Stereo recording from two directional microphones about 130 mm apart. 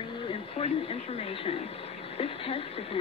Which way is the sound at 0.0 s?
40° left (ahead or behind).